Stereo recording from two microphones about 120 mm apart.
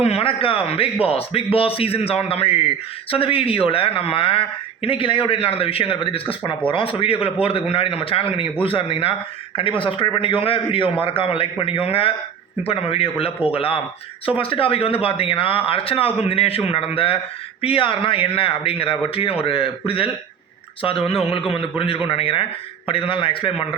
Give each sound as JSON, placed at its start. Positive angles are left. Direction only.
{"t": 0.0, "sound": "a man's voice", "side_deg": 55}